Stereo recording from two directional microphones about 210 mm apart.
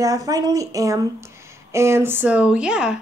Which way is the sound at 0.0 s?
15° right (ahead or behind).